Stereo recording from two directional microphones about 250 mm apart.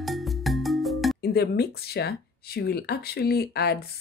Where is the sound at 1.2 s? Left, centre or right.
Left.